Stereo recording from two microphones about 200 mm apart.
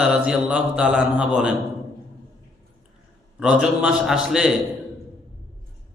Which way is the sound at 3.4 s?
5° right (ahead or behind).